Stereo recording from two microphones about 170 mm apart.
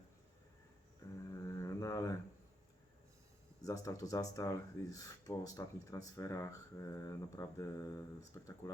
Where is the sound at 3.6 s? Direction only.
20° left (ahead or behind).